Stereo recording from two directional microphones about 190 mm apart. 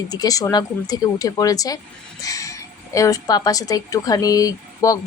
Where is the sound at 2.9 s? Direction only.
20° left (ahead or behind).